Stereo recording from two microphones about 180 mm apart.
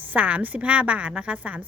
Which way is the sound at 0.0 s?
10° right (ahead or behind).